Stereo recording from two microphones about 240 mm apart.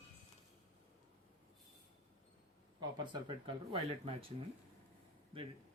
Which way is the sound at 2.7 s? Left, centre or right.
Centre.